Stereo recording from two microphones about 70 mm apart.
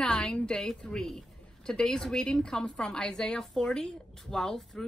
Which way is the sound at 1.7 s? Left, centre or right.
Centre.